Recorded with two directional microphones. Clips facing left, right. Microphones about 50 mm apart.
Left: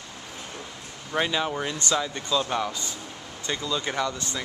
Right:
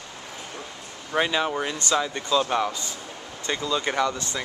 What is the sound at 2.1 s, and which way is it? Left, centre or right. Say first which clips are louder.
Speech: right 3 dB; right.